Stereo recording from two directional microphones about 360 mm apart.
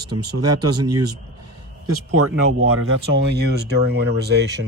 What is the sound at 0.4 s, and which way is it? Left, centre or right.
Speech, right.